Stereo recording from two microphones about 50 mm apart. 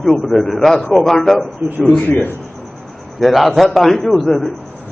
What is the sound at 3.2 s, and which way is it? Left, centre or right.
A man's voice, centre.